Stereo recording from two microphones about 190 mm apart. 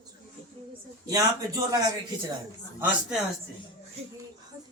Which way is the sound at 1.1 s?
20° right (ahead or behind).